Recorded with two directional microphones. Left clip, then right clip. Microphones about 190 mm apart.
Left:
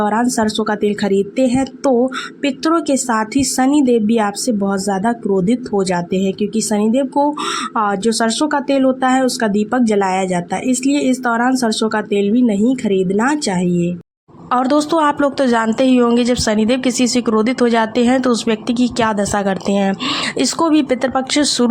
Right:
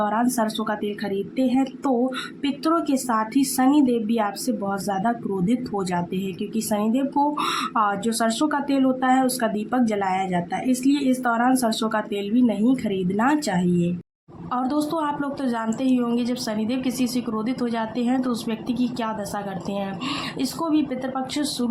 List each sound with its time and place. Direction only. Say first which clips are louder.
0.0 s speech: left 6 dB; 35° left (ahead or behind)
14.5 s a woman's voice: left 10 dB; 45° left (ahead or behind)